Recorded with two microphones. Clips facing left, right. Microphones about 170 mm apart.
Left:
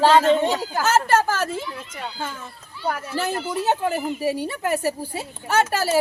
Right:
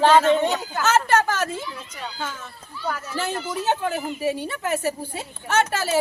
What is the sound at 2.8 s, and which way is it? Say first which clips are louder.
Speech: left 2 dB; 35° left (ahead or behind).